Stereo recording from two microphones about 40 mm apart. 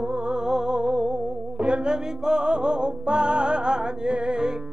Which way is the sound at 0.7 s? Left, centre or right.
Right.